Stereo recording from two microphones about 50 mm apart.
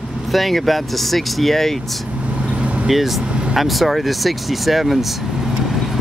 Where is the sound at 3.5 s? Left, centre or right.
Centre.